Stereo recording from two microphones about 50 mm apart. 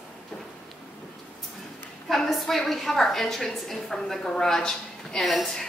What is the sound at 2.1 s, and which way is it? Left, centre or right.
A woman's voice, centre.